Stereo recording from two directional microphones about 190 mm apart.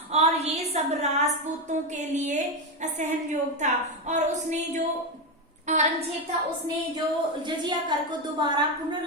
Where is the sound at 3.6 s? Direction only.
40° right (ahead or behind).